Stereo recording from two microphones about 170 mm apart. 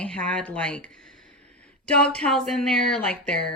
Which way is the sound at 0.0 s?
5° left (ahead or behind).